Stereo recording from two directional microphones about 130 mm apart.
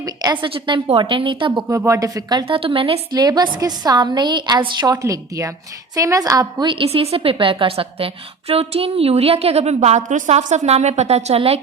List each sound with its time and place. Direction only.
0.0 s speech: 30° right (ahead or behind)
0.5 s a woman's voice: 40° right (ahead or behind)
1.7 s speech: 25° right (ahead or behind)
2.5 s a woman's voice: 45° right (ahead or behind)
3.2 s a woman's voice: 30° right (ahead or behind); by 11.6 s 50° right (ahead or behind)